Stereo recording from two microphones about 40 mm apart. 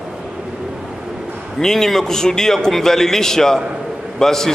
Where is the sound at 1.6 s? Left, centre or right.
Centre.